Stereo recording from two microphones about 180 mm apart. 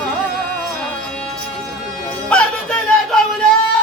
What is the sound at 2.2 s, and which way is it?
Music, 5° left (ahead or behind).